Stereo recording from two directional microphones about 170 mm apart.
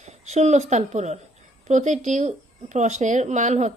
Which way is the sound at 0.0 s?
45° right (ahead or behind).